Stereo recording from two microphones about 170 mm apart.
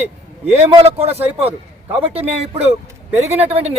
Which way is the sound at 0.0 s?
40° right (ahead or behind).